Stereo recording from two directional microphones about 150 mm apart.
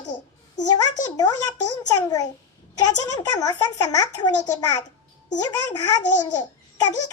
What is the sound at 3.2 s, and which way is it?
A child's voice, 25° left (ahead or behind).